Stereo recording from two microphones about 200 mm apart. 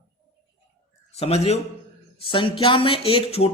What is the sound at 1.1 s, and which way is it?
A man's voice, 30° left (ahead or behind).